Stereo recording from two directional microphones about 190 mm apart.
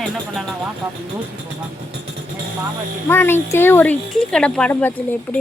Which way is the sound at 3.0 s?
10° left (ahead or behind).